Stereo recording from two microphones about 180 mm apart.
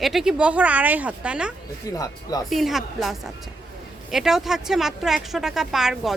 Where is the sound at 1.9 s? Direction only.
20° left (ahead or behind).